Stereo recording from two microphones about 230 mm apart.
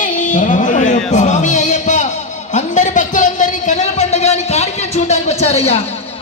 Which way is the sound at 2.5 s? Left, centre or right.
Left.